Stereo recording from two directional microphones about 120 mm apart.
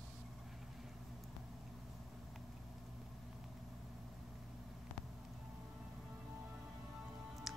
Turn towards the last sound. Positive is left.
turn(degrees=0)  # may be behind; listen again after turning